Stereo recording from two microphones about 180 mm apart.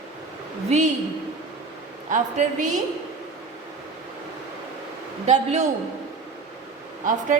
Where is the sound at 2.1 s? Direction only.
40° right (ahead or behind).